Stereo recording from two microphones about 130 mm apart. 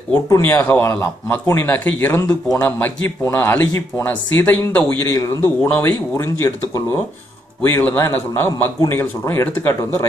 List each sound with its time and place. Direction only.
0.1 s speech: 15° left (ahead or behind)